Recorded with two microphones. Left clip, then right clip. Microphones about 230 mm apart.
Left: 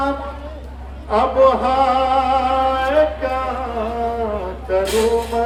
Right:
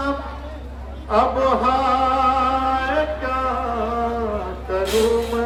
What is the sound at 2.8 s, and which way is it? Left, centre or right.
Music, centre.